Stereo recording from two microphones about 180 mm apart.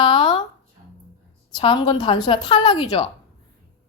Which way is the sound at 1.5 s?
25° left (ahead or behind).